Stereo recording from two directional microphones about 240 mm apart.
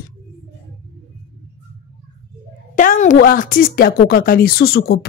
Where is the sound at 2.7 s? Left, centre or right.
Left.